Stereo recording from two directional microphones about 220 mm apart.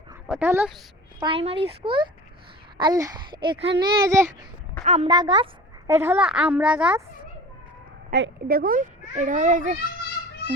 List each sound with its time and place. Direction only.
0.3 s speech: 10° right (ahead or behind)
1.2 s speech: 25° right (ahead or behind)
4.9 s a woman's voice: 25° right (ahead or behind); by 7.0 s 5° right (ahead or behind)
8.1 s a child's voice: 45° right (ahead or behind)